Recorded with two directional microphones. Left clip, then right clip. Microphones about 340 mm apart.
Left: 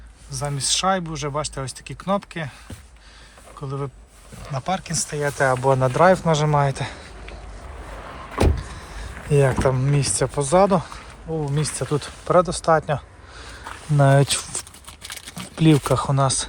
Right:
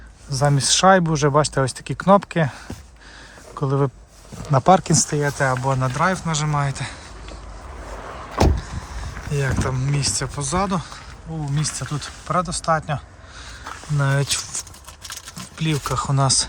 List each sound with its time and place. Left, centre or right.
0.3 s speech: right
3.6 s speech: right
5.2 s speech: centre
8.0 s vehicle: right
9.3 s speech: centre
13.4 s a sound: centre
15.5 s speech: centre